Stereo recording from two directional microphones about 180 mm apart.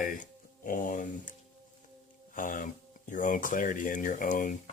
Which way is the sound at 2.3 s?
45° left (ahead or behind).